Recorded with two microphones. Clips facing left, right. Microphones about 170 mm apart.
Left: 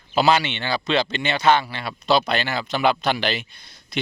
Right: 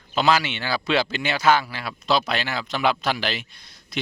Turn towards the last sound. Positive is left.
turn(degrees=0)  # may be behind; listen again after turning